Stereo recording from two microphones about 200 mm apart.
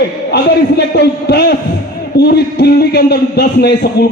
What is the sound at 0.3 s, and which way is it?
A man's voice, 55° left (ahead or behind).